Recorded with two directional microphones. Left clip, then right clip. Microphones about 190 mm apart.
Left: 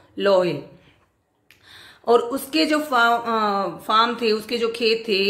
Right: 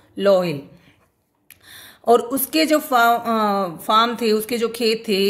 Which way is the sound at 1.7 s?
45° right (ahead or behind).